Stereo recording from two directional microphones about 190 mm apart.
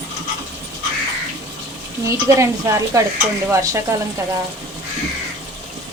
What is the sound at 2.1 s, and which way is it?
Speech, 15° right (ahead or behind).